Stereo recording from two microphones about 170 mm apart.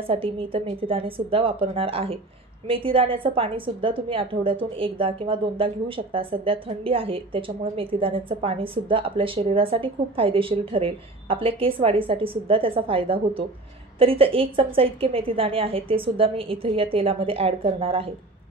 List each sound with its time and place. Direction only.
0.0 s a woman's voice: 35° right (ahead or behind)